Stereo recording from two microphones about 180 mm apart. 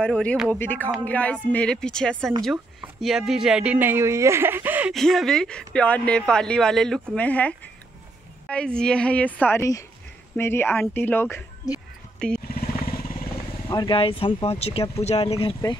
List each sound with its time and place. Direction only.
0.0 s a woman's voice: 5° left (ahead or behind); by 4.9 s 10° right (ahead or behind)
4.9 s a woman's voice: centre (ahead or behind)
12.4 s vehicle: 55° left (ahead or behind)
13.7 s speech: 25° left (ahead or behind)